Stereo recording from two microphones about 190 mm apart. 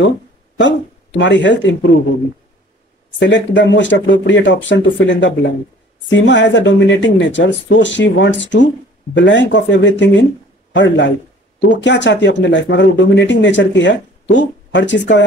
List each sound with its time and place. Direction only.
0.6 s a man's voice: 70° left (ahead or behind)
3.2 s a man's voice: 70° left (ahead or behind)